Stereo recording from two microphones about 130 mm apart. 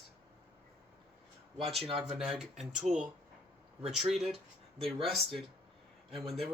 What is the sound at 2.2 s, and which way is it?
Speech, centre (ahead or behind).